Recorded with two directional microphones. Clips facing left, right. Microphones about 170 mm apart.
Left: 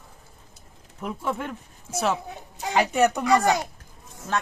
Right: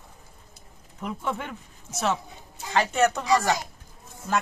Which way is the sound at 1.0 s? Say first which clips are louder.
Left 2 dB; 5° left (ahead or behind).